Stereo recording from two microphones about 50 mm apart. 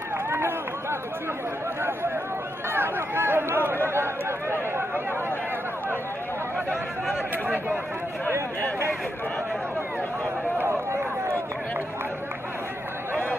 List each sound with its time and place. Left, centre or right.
0.3 s run: right
2.7 s a sound: right
3.8 s chatter: right
7.4 s speech: right
10.7 s run: right